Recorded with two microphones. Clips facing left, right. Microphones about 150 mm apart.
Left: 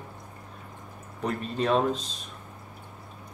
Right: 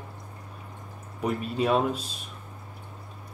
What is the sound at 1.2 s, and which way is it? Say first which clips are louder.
Speech: right 1 dB; 10° right (ahead or behind).